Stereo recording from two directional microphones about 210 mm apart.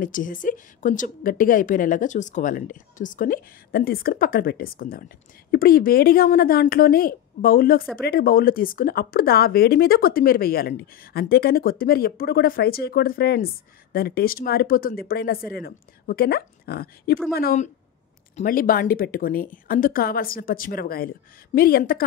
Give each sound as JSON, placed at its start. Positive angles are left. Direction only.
{"t": 0.0, "sound": "a woman's voice", "side_deg": 40}